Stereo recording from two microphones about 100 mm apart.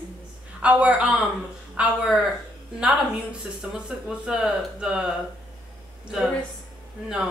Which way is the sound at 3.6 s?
5° right (ahead or behind).